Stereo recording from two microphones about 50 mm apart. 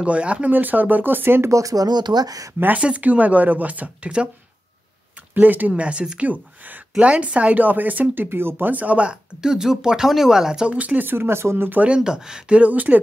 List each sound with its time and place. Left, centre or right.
0.0 s speech: right
0.5 s speech: right
2.1 s speech: right
2.8 s speech: right
5.3 s speech: right
5.8 s speech: right
8.7 s speech: right
9.1 s speech: centre
10.7 s speech: right
11.1 s speech: right
12.0 s speech: centre
12.5 s speech: right